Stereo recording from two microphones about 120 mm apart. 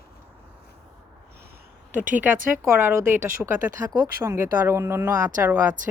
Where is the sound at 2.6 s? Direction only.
20° right (ahead or behind).